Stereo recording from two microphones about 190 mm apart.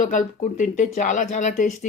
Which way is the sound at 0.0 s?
40° left (ahead or behind).